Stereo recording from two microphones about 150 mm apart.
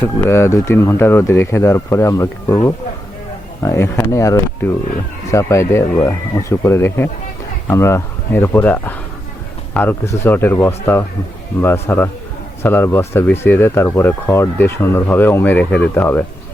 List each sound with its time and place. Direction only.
0.0 s speech: 15° left (ahead or behind)